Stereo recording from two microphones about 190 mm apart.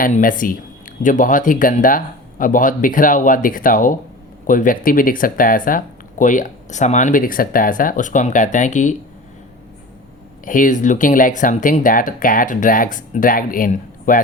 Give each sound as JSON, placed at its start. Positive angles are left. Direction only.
{"t": 0.0, "sound": "speech", "side_deg": 45}
{"t": 10.4, "sound": "speech", "side_deg": 45}